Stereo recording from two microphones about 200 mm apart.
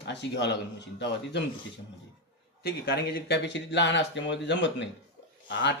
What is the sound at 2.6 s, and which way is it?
Speech, 55° left (ahead or behind).